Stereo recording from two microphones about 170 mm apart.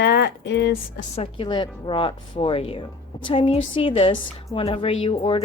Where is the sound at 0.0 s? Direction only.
75° left (ahead or behind).